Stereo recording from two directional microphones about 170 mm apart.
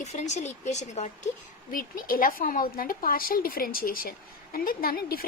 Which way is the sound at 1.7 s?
55° left (ahead or behind).